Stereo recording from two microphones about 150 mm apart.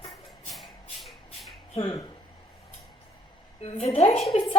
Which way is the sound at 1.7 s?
40° left (ahead or behind).